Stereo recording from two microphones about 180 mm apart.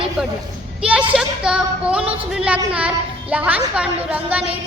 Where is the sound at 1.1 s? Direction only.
5° right (ahead or behind).